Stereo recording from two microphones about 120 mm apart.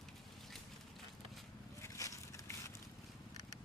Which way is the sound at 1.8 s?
25° left (ahead or behind).